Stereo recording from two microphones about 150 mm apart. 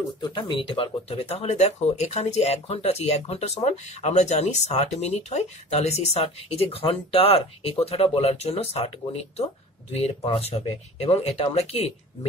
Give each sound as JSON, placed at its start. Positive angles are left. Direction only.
{"t": 0.2, "sound": "speech", "side_deg": 30}
{"t": 10.2, "sound": "speech", "side_deg": 40}